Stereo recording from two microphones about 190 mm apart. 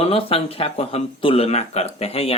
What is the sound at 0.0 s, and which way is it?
Speech, 30° left (ahead or behind).